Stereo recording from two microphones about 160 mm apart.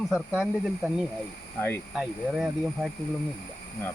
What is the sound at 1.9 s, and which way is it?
Speech, 5° right (ahead or behind).